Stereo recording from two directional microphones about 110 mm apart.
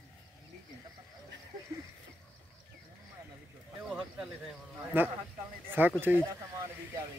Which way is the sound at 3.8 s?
10° right (ahead or behind).